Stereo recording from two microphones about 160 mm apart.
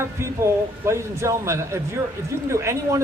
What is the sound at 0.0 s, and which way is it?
A man's voice, 15° right (ahead or behind).